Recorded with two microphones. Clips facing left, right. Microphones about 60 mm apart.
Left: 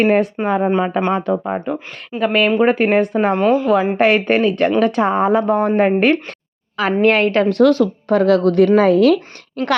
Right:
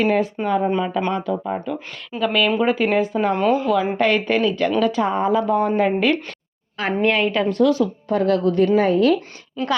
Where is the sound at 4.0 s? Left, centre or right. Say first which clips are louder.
Left 4 dB; left.